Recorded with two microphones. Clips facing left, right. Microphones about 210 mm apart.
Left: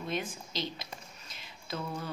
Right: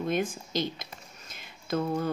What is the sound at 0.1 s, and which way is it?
A woman's voice, 50° right (ahead or behind).